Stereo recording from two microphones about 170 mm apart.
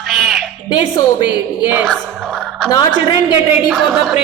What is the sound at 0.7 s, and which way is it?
Speech, 25° left (ahead or behind).